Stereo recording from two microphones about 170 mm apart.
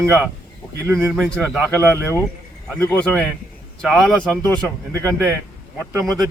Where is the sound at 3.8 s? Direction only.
Centre (ahead or behind).